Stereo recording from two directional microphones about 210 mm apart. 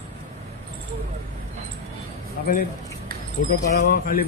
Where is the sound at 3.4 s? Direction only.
50° left (ahead or behind).